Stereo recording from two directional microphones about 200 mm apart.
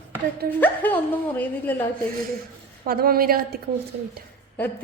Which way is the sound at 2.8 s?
50° right (ahead or behind).